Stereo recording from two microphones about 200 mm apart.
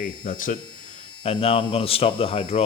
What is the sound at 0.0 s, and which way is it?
Speech, 40° left (ahead or behind).